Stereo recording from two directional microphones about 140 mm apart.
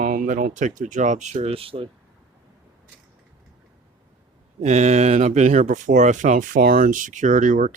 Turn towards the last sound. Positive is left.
turn(degrees=-65)  # may be behind; listen again after turning